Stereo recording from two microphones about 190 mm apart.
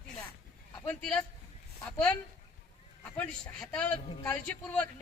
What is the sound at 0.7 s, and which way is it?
A man's voice, 10° left (ahead or behind).